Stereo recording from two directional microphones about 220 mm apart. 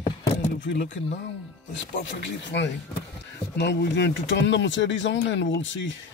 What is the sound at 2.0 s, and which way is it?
Speech, 55° left (ahead or behind).